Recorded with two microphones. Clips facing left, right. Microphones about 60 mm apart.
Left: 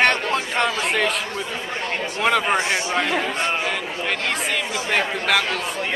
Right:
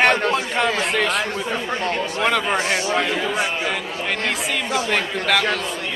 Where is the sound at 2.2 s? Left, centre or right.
Centre.